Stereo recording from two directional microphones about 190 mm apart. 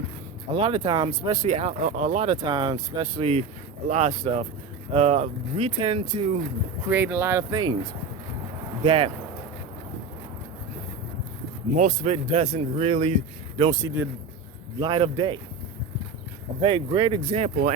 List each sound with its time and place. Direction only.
0.5 s speech: 30° right (ahead or behind)
1.4 s speech: 35° right (ahead or behind)
2.4 s speech: 25° right (ahead or behind)
6.9 s speech: 10° right (ahead or behind)
8.8 s speech: 30° right (ahead or behind)
11.8 s speech: 40° right (ahead or behind)
13.6 s speech: 20° right (ahead or behind)
14.8 s speech: 25° right (ahead or behind)
16.6 s speech: 25° right (ahead or behind)